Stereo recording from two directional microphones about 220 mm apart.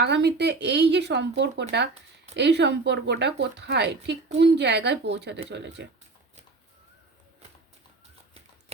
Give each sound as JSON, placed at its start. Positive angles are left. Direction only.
{"t": 0.0, "sound": "speech", "side_deg": -50}